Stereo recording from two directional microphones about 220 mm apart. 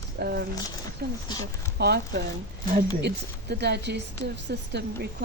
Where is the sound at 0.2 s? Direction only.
45° right (ahead or behind).